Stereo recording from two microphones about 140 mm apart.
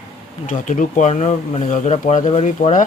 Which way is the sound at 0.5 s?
65° left (ahead or behind).